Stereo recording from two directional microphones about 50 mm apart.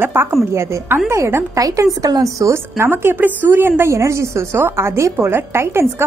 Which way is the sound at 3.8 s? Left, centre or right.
Right.